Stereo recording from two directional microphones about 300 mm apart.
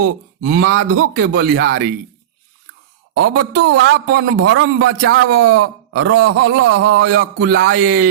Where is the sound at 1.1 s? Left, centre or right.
Right.